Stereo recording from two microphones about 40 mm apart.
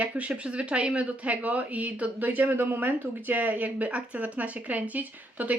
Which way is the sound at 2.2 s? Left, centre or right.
Right.